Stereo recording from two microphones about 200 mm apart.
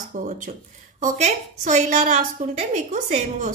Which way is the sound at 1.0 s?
35° right (ahead or behind).